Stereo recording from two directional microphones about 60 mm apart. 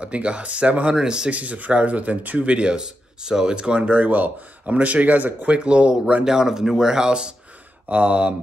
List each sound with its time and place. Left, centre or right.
0.0 s speech: right
6.2 s speech: centre